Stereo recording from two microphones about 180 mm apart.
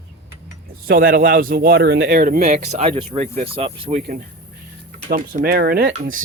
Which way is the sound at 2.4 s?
40° right (ahead or behind).